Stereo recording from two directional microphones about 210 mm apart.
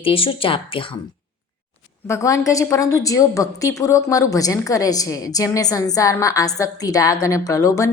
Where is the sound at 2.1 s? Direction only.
15° left (ahead or behind).